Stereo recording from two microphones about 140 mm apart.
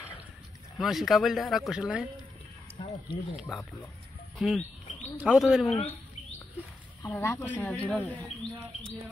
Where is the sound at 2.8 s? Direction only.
40° left (ahead or behind).